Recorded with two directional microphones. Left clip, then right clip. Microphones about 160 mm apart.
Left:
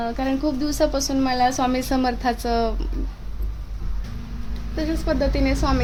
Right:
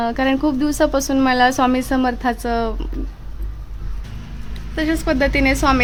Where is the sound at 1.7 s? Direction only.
20° right (ahead or behind).